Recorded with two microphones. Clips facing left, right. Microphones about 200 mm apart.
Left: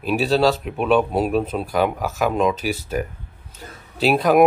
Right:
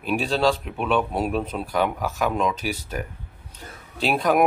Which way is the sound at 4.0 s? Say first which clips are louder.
Left 5 dB; 5° left (ahead or behind).